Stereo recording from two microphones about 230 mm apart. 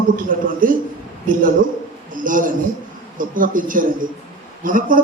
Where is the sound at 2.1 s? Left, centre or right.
Right.